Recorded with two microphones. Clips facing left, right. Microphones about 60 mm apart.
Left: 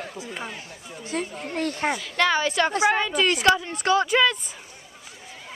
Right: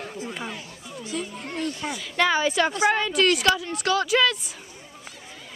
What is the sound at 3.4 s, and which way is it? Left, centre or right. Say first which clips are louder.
Speech: left 2 dB; left.